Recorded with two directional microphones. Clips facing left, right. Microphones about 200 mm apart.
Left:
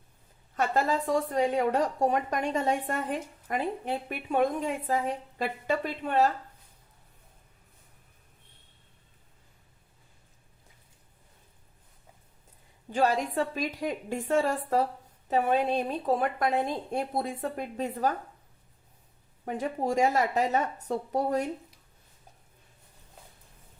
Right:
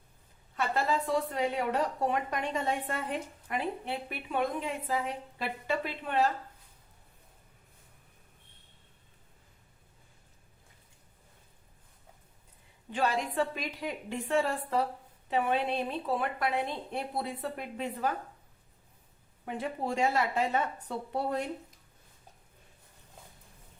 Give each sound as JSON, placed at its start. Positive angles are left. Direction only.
{"t": 0.5, "sound": "a woman's voice", "side_deg": 45}
{"t": 12.9, "sound": "a woman's voice", "side_deg": 40}
{"t": 19.5, "sound": "speech", "side_deg": 40}